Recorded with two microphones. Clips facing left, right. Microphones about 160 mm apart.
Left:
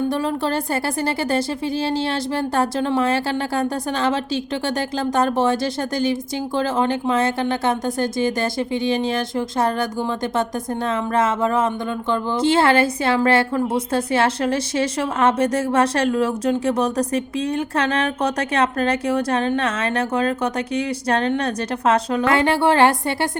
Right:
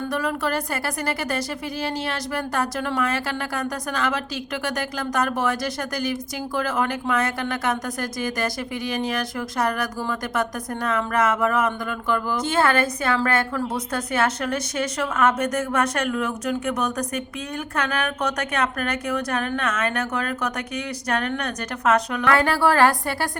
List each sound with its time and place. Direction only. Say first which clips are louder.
0.1 s speech: left 3 dB; 25° left (ahead or behind)